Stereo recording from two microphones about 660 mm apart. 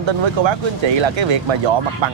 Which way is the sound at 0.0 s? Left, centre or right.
Right.